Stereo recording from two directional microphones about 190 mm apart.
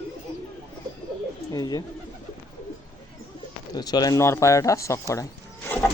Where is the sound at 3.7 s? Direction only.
20° left (ahead or behind).